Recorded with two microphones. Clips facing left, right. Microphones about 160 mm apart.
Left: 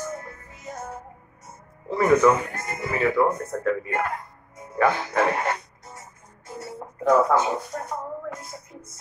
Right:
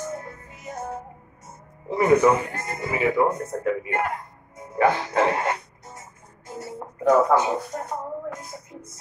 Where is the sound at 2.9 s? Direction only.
15° right (ahead or behind).